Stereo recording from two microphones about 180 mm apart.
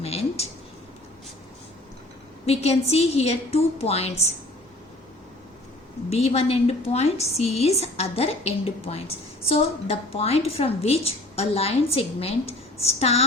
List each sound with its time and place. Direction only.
0.0 s a sound: 35° left (ahead or behind)
2.5 s a woman's voice: 35° left (ahead or behind)
6.1 s a woman's voice: 35° left (ahead or behind)